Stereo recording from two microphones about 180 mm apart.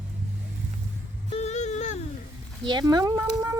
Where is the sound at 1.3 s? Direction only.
40° left (ahead or behind).